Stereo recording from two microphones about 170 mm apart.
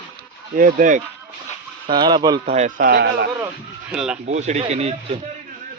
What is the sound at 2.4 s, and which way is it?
Speech, 40° right (ahead or behind).